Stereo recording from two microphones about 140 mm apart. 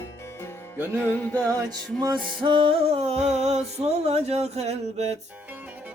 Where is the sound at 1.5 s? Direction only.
30° right (ahead or behind); by 5.1 s 50° right (ahead or behind).